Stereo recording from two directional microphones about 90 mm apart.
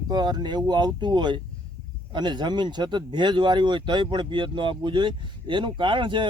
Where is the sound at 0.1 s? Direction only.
55° right (ahead or behind).